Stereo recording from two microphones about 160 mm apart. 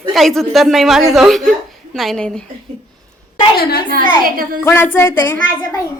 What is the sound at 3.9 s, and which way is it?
Speech, 65° right (ahead or behind).